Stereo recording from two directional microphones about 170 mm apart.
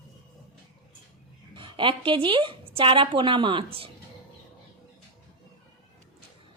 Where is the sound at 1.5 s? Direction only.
30° right (ahead or behind).